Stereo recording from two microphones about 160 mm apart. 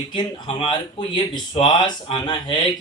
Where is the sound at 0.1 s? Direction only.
30° left (ahead or behind).